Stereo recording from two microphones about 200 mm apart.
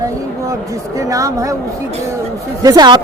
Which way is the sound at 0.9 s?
15° right (ahead or behind).